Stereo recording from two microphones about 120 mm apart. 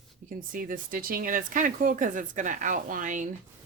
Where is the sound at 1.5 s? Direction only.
90° right.